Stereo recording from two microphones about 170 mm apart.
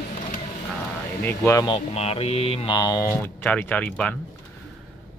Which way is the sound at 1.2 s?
15° left (ahead or behind).